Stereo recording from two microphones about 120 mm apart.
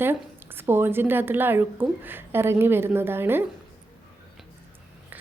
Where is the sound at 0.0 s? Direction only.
15° right (ahead or behind).